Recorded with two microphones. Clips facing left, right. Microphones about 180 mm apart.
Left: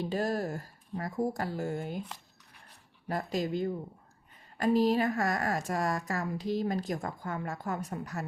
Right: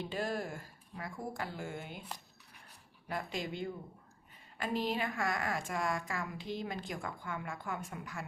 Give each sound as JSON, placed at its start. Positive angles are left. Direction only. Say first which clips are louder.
{"t": 0.0, "sound": "speech", "louder": "left 6 dB", "side_deg": 40}
{"t": 3.1, "sound": "a woman's voice", "louder": "left 7 dB", "side_deg": 40}